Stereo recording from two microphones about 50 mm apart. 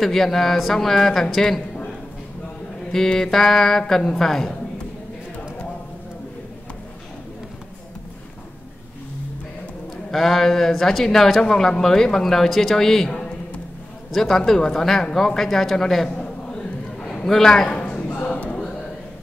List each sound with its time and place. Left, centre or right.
0.0 s speech: centre
2.9 s speech: centre
10.1 s speech: centre
14.1 s speech: centre
16.2 s a sound: centre
17.3 s a man's voice: centre
18.0 s a sound: left